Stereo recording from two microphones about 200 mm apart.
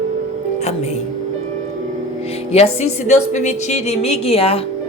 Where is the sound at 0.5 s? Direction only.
35° left (ahead or behind).